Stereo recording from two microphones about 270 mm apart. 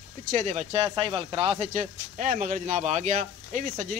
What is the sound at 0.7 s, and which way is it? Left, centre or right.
Speech, centre.